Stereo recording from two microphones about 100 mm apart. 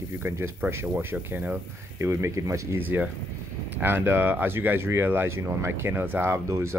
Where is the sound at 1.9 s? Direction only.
30° right (ahead or behind).